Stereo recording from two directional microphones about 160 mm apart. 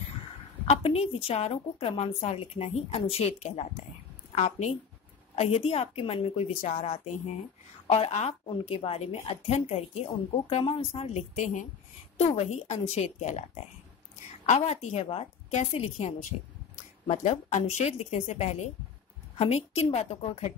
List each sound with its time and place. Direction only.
0.7 s a woman's voice: 40° left (ahead or behind)
7.8 s a woman's voice: 40° left (ahead or behind)